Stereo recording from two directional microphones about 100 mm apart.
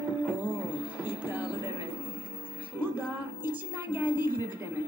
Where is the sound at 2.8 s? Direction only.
20° right (ahead or behind).